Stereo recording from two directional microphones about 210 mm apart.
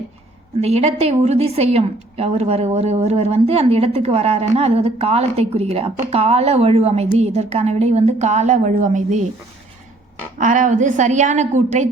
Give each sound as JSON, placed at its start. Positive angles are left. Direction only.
{"t": 0.6, "sound": "a woman's voice", "side_deg": -30}
{"t": 10.4, "sound": "speech", "side_deg": -35}